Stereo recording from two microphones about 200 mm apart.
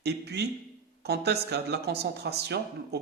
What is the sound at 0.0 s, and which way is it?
Speech, 55° right (ahead or behind).